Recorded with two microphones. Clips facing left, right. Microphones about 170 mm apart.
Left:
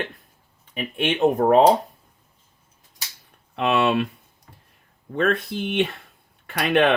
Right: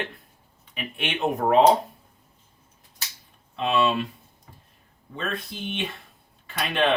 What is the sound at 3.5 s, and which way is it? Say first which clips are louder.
Speech: left 3 dB; 65° left (ahead or behind).